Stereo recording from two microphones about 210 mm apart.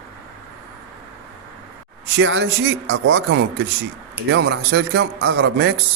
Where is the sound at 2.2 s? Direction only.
60° right (ahead or behind).